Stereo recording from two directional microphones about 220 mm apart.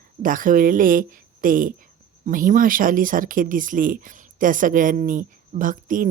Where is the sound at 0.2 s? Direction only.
40° right (ahead or behind).